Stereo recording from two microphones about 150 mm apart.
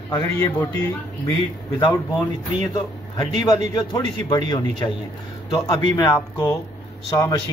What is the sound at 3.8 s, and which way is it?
Speech, 30° left (ahead or behind).